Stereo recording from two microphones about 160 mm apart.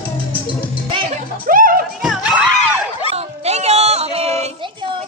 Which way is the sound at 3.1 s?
40° right (ahead or behind).